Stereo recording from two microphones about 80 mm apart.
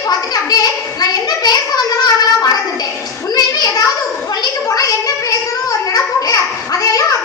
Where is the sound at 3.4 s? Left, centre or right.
Left.